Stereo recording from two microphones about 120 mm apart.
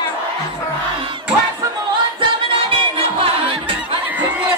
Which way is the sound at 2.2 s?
50° right (ahead or behind).